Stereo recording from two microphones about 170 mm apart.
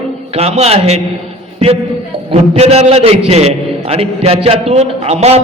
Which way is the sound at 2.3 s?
40° right (ahead or behind).